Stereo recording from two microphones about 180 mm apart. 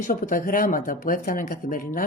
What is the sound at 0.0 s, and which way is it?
Speech, 50° left (ahead or behind).